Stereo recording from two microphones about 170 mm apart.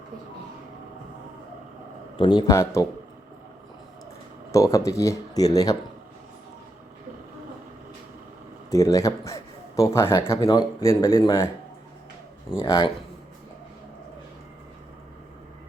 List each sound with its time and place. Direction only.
2.1 s speech: 25° left (ahead or behind)
4.5 s speech: 20° left (ahead or behind)
8.7 s a man's voice: 20° left (ahead or behind)
12.5 s speech: 30° left (ahead or behind)